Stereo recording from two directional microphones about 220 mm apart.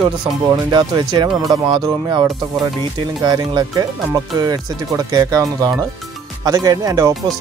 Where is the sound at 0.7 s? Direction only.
20° right (ahead or behind).